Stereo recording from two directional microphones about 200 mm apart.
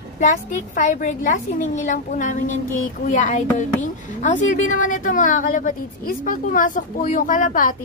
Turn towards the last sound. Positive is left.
turn(degrees=40)  # may be behind; listen again after turning